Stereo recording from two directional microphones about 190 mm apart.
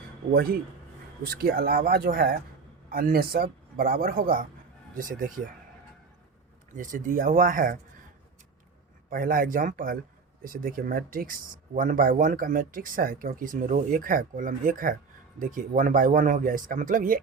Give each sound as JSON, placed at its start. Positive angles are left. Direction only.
{"t": 0.3, "sound": "speech", "side_deg": -50}
{"t": 6.7, "sound": "speech", "side_deg": -45}
{"t": 9.0, "sound": "speech", "side_deg": -45}